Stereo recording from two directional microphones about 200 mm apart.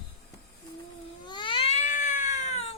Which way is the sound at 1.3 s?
25° left (ahead or behind).